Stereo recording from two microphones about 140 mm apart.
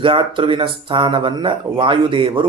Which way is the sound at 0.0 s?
40° right (ahead or behind).